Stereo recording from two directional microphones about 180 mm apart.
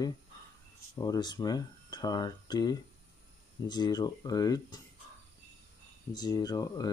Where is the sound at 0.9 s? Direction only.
20° left (ahead or behind).